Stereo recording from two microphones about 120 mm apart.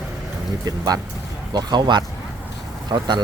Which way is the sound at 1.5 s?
35° right (ahead or behind).